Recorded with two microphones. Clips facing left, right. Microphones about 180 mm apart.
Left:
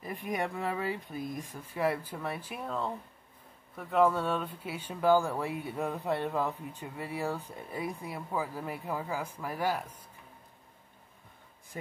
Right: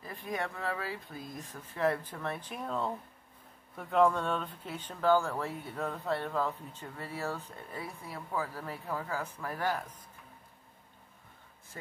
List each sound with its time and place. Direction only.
0.0 s speech: 15° left (ahead or behind)
11.7 s speech: 15° left (ahead or behind)